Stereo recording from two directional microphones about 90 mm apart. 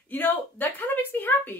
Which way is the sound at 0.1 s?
20° left (ahead or behind).